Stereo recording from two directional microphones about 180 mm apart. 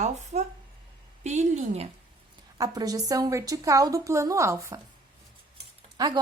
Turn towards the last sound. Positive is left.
turn(degrees=-20)  # may be behind; listen again after turning